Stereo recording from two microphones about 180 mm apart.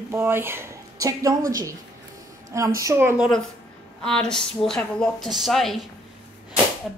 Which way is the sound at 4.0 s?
5° left (ahead or behind).